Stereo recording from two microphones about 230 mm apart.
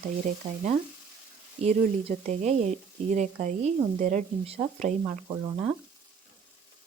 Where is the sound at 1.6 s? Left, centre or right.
Right.